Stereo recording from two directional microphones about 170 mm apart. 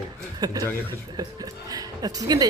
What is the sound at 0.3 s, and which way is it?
Speech, 25° right (ahead or behind).